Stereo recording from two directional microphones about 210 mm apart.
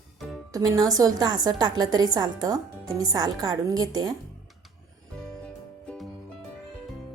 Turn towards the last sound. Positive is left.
turn(degrees=5)  # may be behind; listen again after turning